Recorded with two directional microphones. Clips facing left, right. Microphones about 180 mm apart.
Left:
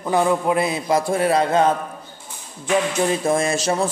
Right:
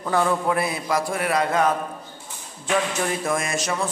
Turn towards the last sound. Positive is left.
turn(degrees=30)  # may be behind; listen again after turning